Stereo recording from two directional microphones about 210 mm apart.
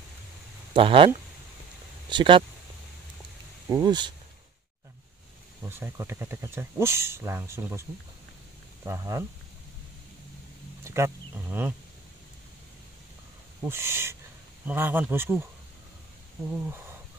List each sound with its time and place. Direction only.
0.7 s speech: 25° right (ahead or behind)
3.6 s speech: 20° right (ahead or behind)
5.6 s speech: 10° right (ahead or behind)
8.8 s speech: 15° right (ahead or behind)
10.8 s speech: 10° right (ahead or behind)
13.7 s speech: 10° right (ahead or behind)
16.4 s speech: 10° right (ahead or behind)